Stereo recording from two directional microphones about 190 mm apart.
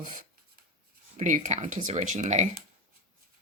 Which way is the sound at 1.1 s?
40° right (ahead or behind).